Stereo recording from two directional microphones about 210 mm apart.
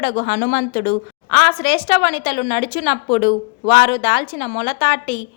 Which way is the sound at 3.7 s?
25° left (ahead or behind).